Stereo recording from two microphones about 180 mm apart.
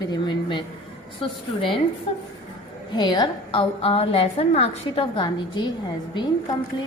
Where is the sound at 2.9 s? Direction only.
25° left (ahead or behind).